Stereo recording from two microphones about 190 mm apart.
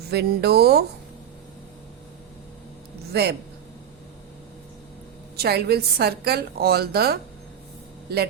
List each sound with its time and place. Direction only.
0.1 s a woman's voice: 60° right (ahead or behind)
3.1 s a man's voice: 60° right (ahead or behind)
5.4 s a woman's voice: 55° right (ahead or behind)